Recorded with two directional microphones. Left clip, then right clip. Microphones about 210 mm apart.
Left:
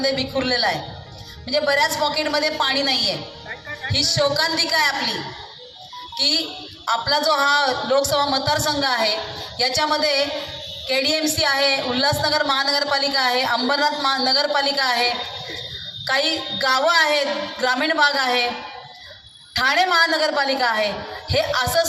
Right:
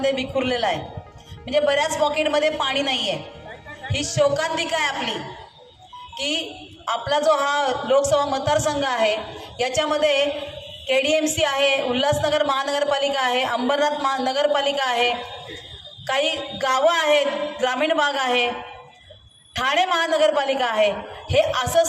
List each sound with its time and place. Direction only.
0.0 s a woman's voice: 50° right (ahead or behind)
6.8 s a woman's voice: 50° right (ahead or behind)
19.5 s a woman's voice: 50° right (ahead or behind)